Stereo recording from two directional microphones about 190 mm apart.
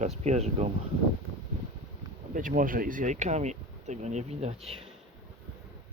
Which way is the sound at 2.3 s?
45° right (ahead or behind).